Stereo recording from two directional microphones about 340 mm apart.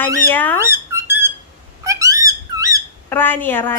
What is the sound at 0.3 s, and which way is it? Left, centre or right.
Speech, centre.